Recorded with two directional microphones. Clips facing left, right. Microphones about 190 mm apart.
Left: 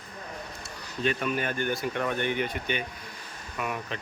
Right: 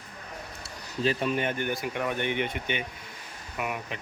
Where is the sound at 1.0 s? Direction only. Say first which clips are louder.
Right 1 dB; 25° right (ahead or behind).